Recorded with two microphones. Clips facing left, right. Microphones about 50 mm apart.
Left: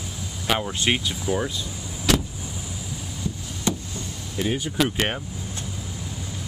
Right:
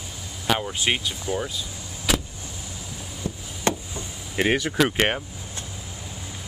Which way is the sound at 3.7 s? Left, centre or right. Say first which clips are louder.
Right 2 dB; right.